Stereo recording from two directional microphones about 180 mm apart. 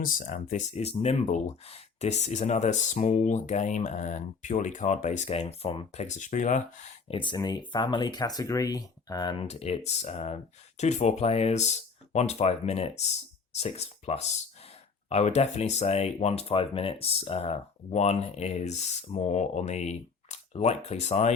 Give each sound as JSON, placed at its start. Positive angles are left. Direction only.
{"t": 0.0, "sound": "speech", "side_deg": 50}
{"t": 7.1, "sound": "speech", "side_deg": 25}
{"t": 9.5, "sound": "speech", "side_deg": 35}